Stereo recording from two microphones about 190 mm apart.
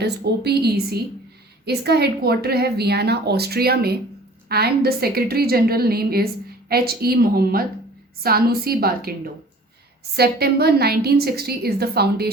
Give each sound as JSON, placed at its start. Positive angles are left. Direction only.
{"t": 0.0, "sound": "a woman's voice", "side_deg": -60}
{"t": 10.2, "sound": "a woman's voice", "side_deg": -55}